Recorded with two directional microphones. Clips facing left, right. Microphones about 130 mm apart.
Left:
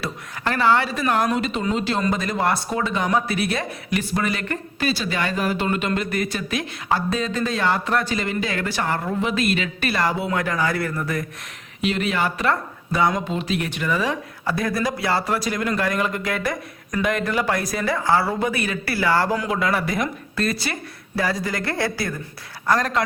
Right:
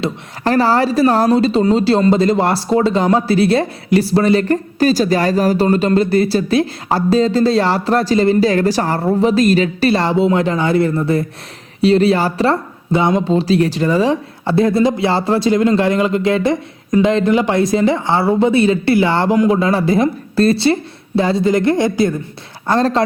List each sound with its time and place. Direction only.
0.4 s speech: 35° right (ahead or behind)